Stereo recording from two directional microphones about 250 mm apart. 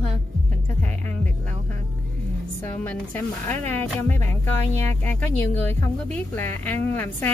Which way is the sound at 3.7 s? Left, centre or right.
Centre.